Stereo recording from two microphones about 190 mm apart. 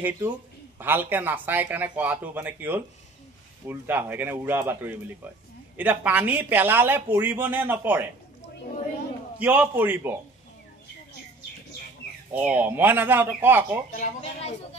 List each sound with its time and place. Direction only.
0.7 s speech: 10° right (ahead or behind)
9.4 s speech: 10° right (ahead or behind)
12.3 s speech: 10° right (ahead or behind)
13.9 s speech: 35° left (ahead or behind)